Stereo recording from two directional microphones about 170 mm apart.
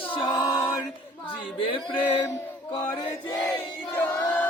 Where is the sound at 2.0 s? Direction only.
15° left (ahead or behind).